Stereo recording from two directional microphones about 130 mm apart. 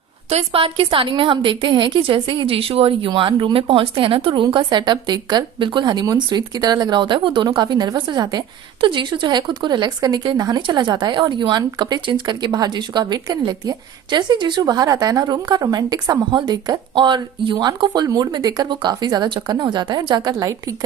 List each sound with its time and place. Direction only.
0.3 s a woman's voice: 50° right (ahead or behind); by 20.7 s 25° right (ahead or behind)